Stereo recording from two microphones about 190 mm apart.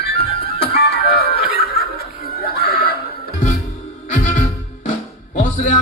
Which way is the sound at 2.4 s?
55° left (ahead or behind).